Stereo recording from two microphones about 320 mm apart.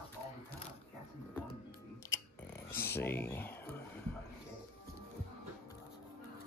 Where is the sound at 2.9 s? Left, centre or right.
Centre.